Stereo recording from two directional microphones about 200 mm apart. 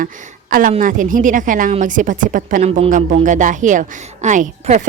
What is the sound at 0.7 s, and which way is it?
A woman's voice, 40° right (ahead or behind).